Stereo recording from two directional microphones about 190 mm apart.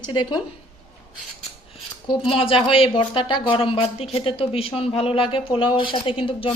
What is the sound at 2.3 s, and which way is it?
Speech, 30° left (ahead or behind).